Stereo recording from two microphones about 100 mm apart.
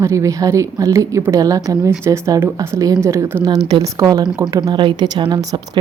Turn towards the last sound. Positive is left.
turn(degrees=-45)  # may be behind; listen again after turning